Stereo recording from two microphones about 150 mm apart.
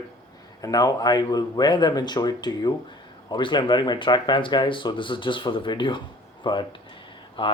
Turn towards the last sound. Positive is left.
turn(degrees=35)  # may be behind; listen again after turning